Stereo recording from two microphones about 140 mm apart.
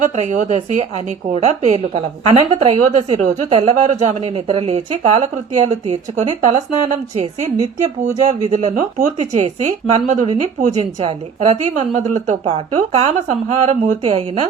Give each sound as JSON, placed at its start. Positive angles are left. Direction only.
{"t": 0.0, "sound": "a woman's voice", "side_deg": -60}
{"t": 8.4, "sound": "a woman's voice", "side_deg": -60}
{"t": 9.3, "sound": "a woman's voice", "side_deg": -55}